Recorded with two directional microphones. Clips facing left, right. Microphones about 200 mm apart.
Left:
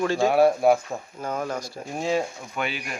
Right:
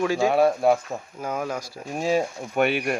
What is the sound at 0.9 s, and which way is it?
Speech, 5° right (ahead or behind).